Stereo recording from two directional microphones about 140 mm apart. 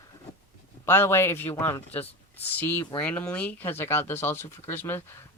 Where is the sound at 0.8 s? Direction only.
15° left (ahead or behind).